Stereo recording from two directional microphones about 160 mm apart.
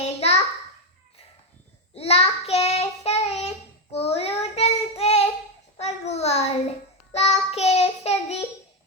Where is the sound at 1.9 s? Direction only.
40° left (ahead or behind).